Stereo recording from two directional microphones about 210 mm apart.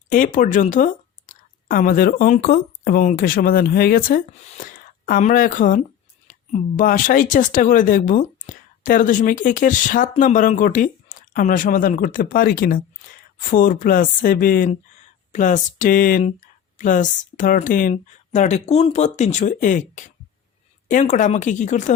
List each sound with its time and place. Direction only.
0.1 s speech: 40° left (ahead or behind)